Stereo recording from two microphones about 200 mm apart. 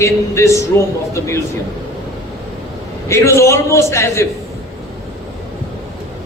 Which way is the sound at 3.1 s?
15° left (ahead or behind).